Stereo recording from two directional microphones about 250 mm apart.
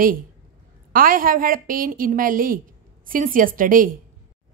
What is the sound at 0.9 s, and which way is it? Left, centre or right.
A woman's voice, right.